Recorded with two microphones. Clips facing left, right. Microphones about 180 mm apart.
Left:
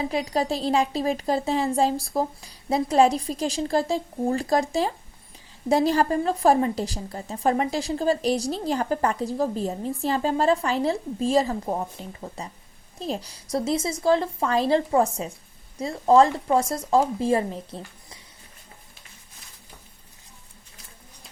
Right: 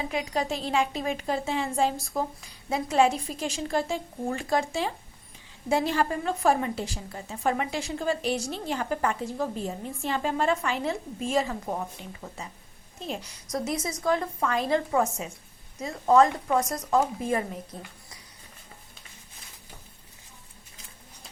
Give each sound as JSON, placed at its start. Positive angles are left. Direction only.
{"t": 0.1, "sound": "a woman's voice", "side_deg": 35}